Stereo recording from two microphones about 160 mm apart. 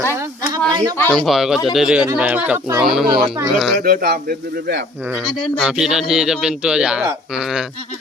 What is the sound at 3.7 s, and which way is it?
Speech, 65° right (ahead or behind).